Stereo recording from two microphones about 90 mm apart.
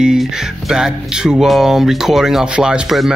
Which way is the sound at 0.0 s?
5° right (ahead or behind).